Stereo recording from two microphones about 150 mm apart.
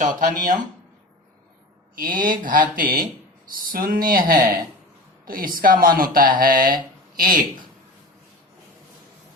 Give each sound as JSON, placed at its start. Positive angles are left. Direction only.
{"t": 0.0, "sound": "speech", "side_deg": -60}
{"t": 2.0, "sound": "speech", "side_deg": -65}